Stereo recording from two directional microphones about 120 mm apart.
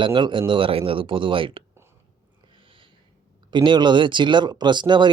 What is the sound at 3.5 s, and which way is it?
Speech, 40° right (ahead or behind).